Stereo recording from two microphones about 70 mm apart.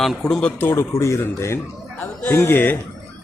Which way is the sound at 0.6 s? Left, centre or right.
Left.